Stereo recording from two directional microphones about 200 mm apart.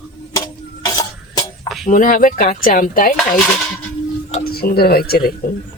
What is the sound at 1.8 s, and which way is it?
Speech, 40° left (ahead or behind).